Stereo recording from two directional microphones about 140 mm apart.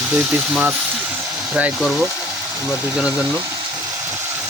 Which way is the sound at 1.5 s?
5° right (ahead or behind).